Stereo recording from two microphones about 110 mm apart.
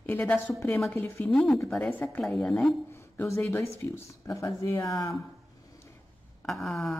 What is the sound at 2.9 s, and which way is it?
Speech, 25° left (ahead or behind).